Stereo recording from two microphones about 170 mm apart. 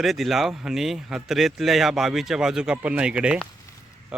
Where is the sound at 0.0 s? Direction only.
Centre (ahead or behind).